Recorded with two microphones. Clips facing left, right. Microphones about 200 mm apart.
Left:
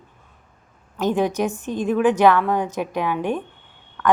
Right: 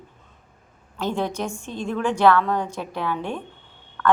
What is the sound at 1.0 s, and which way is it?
A woman's voice, 15° left (ahead or behind).